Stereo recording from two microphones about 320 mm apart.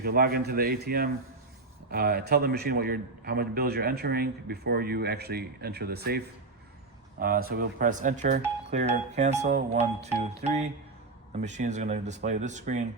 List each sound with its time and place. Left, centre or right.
0.0 s a man's voice: right